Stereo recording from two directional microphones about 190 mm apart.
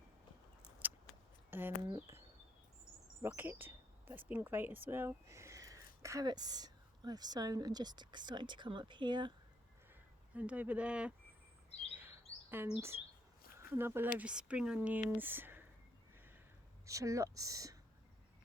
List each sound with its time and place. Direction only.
1.5 s a sound: 10° right (ahead or behind)
3.2 s speech: 10° right (ahead or behind)
10.3 s speech: 5° right (ahead or behind)
12.5 s speech: 10° right (ahead or behind)
16.8 s speech: 15° right (ahead or behind)